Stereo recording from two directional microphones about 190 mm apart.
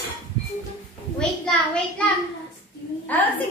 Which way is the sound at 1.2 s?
5° left (ahead or behind).